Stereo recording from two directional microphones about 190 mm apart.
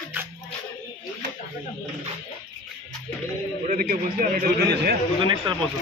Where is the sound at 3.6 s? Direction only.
50° right (ahead or behind).